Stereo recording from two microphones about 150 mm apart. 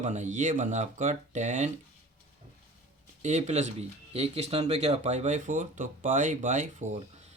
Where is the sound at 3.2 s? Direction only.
50° right (ahead or behind).